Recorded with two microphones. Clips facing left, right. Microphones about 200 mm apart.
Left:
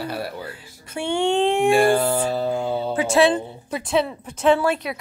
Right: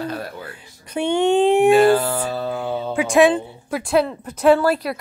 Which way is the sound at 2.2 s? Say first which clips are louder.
Left 2 dB; 20° left (ahead or behind).